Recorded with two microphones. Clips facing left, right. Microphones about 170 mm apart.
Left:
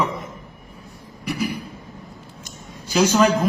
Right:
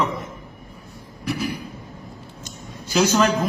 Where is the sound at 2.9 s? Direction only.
5° left (ahead or behind).